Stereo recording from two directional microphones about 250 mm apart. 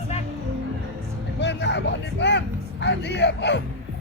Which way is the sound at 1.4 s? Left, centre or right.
Left.